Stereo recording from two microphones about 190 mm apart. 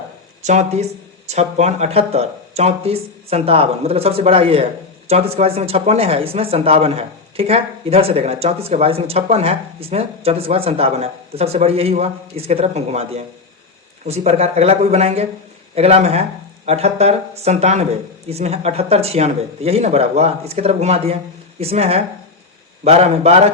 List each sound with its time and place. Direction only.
0.4 s speech: 35° right (ahead or behind)